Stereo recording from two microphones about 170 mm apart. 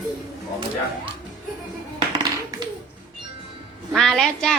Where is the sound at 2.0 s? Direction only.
25° right (ahead or behind).